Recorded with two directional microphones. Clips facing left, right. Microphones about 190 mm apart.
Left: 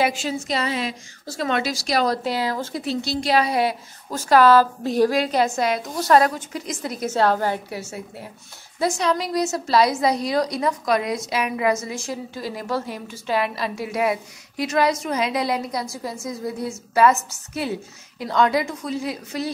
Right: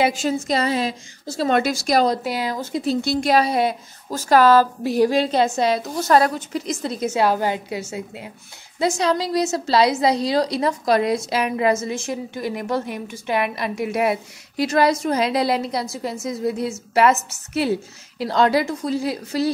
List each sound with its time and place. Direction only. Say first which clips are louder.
0.2 s a woman's voice: right 4 dB; 45° right (ahead or behind)
1.2 s speech: right 4 dB; 25° right (ahead or behind)
1.5 s a woman's voice: right 4 dB; 50° right (ahead or behind)
2.0 s a woman's voice: right 1 dB; 15° right (ahead or behind)
2.8 s a woman's voice: right 8 dB; 50° right (ahead or behind)
3.4 s a woman's voice: right 1 dB; 25° right (ahead or behind)
4.2 s a woman's voice: even; 40° right (ahead or behind)
4.8 s a woman's voice: right 1 dB; 10° right (ahead or behind)
5.1 s a woman's voice: right 2 dB; 25° right (ahead or behind)
7.1 s a woman's voice: even; 15° right (ahead or behind)
14.6 s a woman's voice: right 3 dB; 35° right (ahead or behind)
18.2 s a woman's voice: right 2 dB; 35° right (ahead or behind)